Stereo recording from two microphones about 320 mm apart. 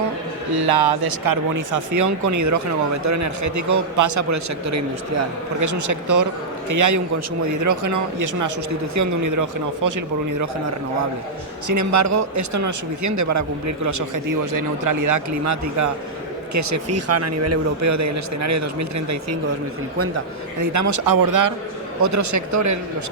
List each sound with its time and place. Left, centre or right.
0.5 s speech: right
11.7 s speech: right
22.0 s speech: right